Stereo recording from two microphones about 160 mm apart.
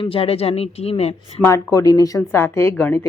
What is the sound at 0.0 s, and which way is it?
Speech, 35° left (ahead or behind).